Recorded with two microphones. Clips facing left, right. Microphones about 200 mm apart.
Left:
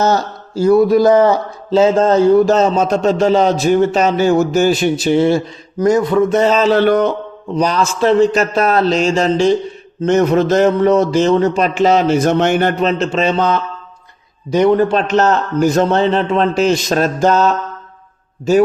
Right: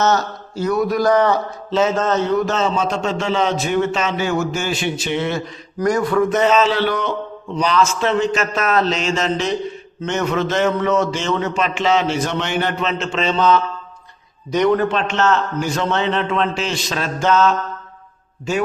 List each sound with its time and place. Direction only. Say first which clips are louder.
0.6 s a man's voice: left 8 dB; 30° left (ahead or behind)
5.8 s a man's voice: left 4 dB; 20° left (ahead or behind)
13.2 s mantra: right 1 dB; 50° left (ahead or behind)
14.8 s a man's voice: left 6 dB; 35° left (ahead or behind)